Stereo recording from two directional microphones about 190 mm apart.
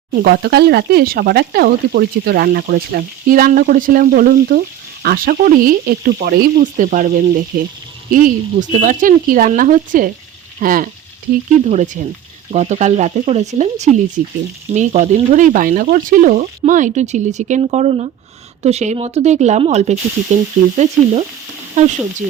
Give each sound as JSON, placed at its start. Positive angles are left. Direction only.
{"t": 0.1, "sound": "speech", "side_deg": -55}
{"t": 11.6, "sound": "speech", "side_deg": -35}